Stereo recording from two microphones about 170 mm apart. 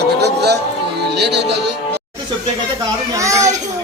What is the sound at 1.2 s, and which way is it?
Music, 90° right.